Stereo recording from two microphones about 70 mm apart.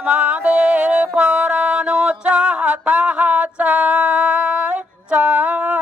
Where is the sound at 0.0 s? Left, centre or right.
Right.